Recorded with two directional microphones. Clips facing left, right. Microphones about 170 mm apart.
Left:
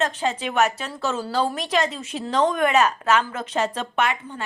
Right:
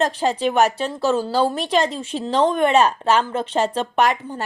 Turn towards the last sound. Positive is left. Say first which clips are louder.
# right 5 dB
turn(degrees=-35)  # may be behind; listen again after turning